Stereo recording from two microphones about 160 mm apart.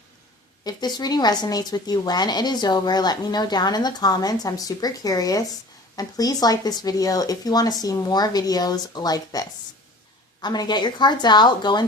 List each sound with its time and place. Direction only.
0.6 s speech: 25° left (ahead or behind)